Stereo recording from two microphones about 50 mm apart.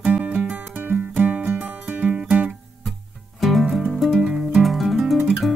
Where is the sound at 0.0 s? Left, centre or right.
Right.